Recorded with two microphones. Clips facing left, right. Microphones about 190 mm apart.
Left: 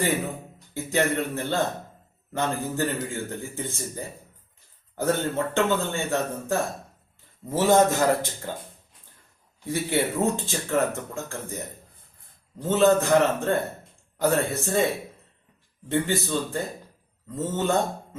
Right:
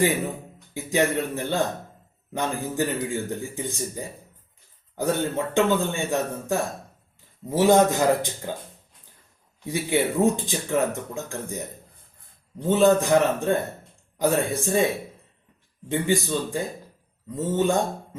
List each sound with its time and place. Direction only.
0.7 s speech: 15° right (ahead or behind)
9.6 s speech: 15° right (ahead or behind)
12.6 s speech: 15° right (ahead or behind)
15.9 s speech: 15° right (ahead or behind)